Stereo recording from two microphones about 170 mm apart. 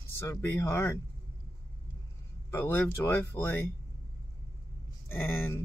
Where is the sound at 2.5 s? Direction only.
10° left (ahead or behind).